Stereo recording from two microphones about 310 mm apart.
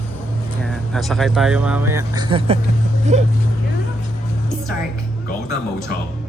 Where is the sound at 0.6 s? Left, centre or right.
Centre; by 3.3 s right.